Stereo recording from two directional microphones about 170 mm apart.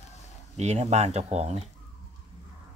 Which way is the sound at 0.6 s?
40° right (ahead or behind).